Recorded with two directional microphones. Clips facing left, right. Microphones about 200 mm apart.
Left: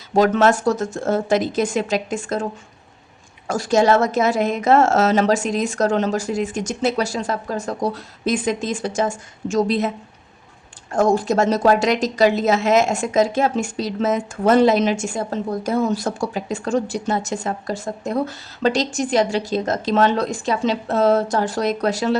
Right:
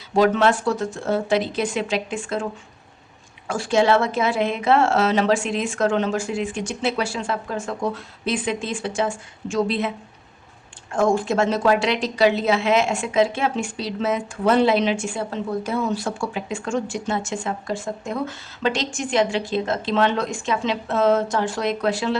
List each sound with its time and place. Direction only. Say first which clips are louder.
0.1 s speech: left 2 dB; 45° left (ahead or behind)
10.9 s speech: left 2 dB; 40° left (ahead or behind)